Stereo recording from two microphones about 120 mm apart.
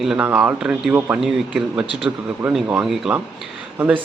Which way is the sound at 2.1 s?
15° right (ahead or behind).